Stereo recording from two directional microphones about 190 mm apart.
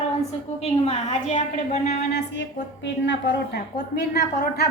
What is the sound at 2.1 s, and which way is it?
A woman's voice, 65° left (ahead or behind).